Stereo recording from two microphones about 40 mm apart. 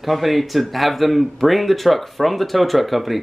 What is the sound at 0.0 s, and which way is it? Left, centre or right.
Speech, centre.